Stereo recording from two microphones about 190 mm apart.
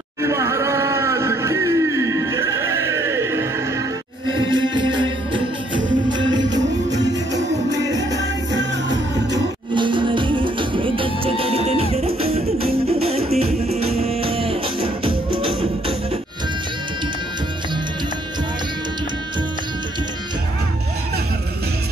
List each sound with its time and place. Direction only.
0.2 s music: 15° right (ahead or behind)
4.5 s music: 25° right (ahead or behind)
7.3 s music: 20° right (ahead or behind)
9.3 s music: 25° right (ahead or behind)